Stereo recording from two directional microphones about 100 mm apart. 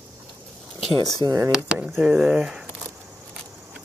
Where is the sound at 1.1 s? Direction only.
35° right (ahead or behind).